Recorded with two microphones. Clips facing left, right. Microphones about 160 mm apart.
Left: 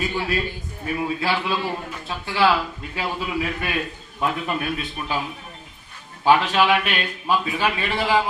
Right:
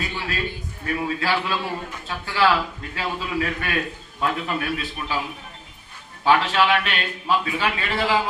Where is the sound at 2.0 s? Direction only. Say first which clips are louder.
Left 1 dB; 15° left (ahead or behind).